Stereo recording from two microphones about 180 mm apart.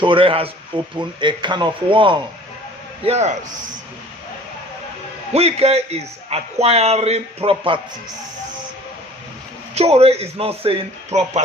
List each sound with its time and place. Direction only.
0.0 s speech: 30° right (ahead or behind)
3.1 s a man's voice: 40° right (ahead or behind)
5.3 s a man's voice: 35° right (ahead or behind)
9.7 s a man's voice: 35° right (ahead or behind)